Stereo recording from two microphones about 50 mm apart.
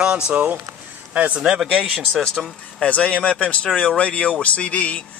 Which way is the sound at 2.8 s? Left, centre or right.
Left.